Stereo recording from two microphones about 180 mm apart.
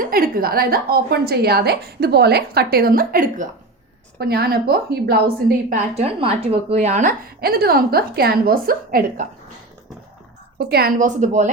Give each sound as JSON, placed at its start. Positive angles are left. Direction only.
{"t": 0.0, "sound": "a woman's voice", "side_deg": -55}
{"t": 4.2, "sound": "a woman's voice", "side_deg": -60}
{"t": 6.0, "sound": "a woman's voice", "side_deg": -30}
{"t": 10.6, "sound": "a woman's voice", "side_deg": -60}